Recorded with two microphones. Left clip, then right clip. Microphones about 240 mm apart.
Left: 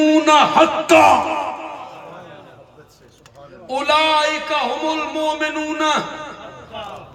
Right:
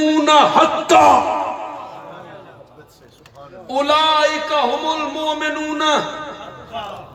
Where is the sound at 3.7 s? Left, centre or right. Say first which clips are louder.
Right 1 dB; left.